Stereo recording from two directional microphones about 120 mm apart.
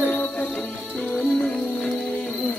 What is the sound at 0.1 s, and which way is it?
Music, 15° left (ahead or behind).